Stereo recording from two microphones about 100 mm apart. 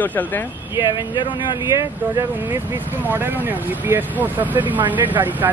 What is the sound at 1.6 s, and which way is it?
Speech, 30° right (ahead or behind).